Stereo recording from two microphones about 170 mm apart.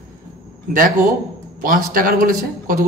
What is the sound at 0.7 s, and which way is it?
A man's voice, 55° right (ahead or behind).